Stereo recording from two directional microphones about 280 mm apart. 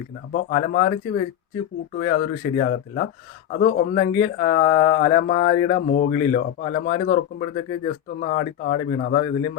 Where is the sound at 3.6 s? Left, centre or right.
Left.